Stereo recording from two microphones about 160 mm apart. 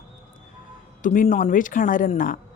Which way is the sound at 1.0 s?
50° left (ahead or behind).